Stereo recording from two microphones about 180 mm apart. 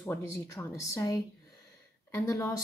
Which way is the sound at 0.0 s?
15° left (ahead or behind).